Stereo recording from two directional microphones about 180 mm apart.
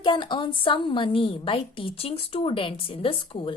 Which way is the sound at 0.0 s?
25° left (ahead or behind).